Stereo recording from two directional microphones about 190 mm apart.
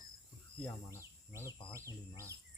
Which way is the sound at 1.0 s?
15° right (ahead or behind).